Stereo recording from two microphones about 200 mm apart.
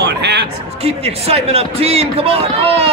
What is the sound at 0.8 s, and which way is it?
A man's voice, 30° right (ahead or behind).